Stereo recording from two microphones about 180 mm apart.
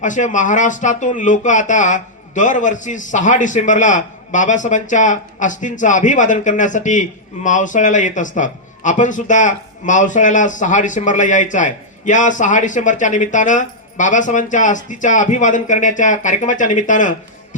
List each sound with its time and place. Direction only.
0.0 s speech: 45° left (ahead or behind)